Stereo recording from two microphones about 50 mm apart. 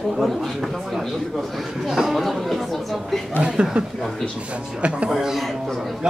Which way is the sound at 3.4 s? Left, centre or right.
Centre.